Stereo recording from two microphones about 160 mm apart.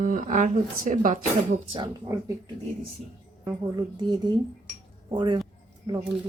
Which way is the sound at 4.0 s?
25° right (ahead or behind).